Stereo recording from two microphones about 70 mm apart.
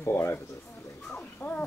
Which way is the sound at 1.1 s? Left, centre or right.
Left.